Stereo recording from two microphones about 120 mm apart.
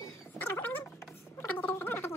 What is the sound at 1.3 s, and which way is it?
Gargling, 20° left (ahead or behind).